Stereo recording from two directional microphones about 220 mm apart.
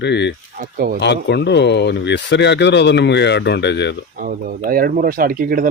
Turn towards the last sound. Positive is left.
turn(degrees=-40)  # may be behind; listen again after turning